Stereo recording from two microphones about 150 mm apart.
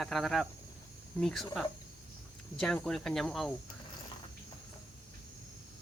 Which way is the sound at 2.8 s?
5° left (ahead or behind).